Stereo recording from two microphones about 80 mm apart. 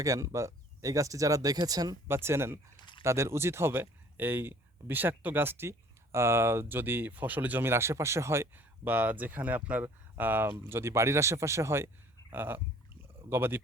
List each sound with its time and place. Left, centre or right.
0.0 s speech: right
2.0 s speech: right
2.7 s a sound: left
3.0 s speech: right
8.5 s speech: right